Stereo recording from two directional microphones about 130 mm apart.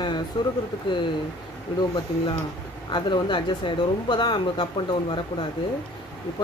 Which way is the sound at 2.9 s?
35° left (ahead or behind).